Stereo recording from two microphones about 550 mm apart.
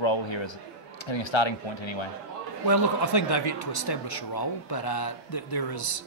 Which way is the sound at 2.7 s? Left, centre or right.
Left.